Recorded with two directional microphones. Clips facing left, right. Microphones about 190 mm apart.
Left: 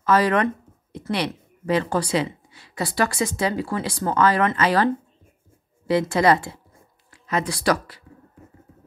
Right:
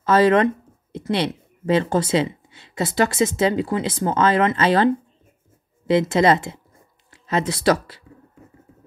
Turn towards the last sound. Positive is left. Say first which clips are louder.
# right 3 dB
turn(degrees=-25)  # may be behind; listen again after turning